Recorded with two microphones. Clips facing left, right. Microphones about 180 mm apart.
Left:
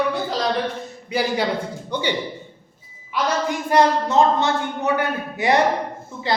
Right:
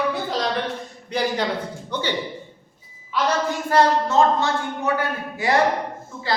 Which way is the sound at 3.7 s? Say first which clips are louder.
Left 1 dB; 15° left (ahead or behind).